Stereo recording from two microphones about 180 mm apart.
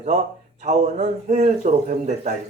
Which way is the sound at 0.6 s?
40° right (ahead or behind).